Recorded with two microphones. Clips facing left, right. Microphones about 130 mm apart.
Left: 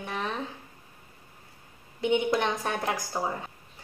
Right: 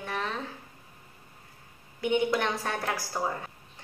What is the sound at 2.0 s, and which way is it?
A woman's voice, 20° left (ahead or behind).